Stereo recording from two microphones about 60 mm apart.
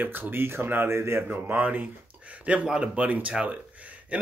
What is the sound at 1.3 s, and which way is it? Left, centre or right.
Speech, right.